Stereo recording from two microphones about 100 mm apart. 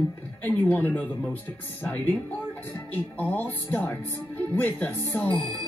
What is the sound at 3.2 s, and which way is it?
Speech, 20° left (ahead or behind).